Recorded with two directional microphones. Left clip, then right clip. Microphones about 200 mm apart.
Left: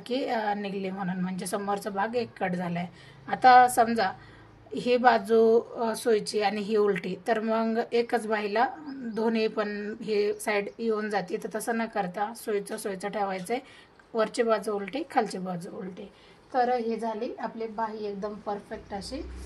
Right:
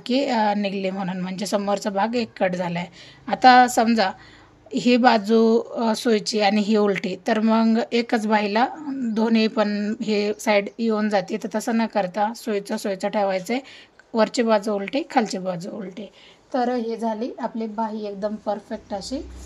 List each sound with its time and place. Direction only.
0.0 s a woman's voice: 55° right (ahead or behind)